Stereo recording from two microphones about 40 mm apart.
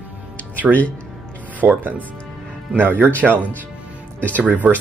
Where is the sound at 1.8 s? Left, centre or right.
Right.